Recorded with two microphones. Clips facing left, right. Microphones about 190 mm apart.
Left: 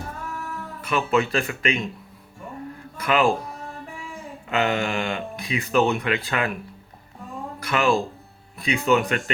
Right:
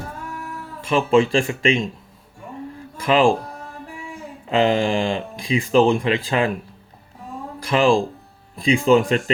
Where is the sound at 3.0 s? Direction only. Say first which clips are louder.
Right 4 dB; 30° right (ahead or behind).